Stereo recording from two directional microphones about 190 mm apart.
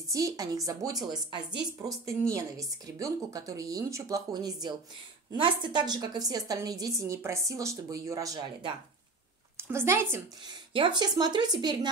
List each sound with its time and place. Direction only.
0.1 s a woman's voice: 20° right (ahead or behind)
10.7 s speech: 25° right (ahead or behind)